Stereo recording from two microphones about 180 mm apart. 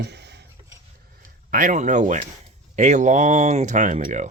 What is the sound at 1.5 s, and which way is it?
Speech, 45° right (ahead or behind).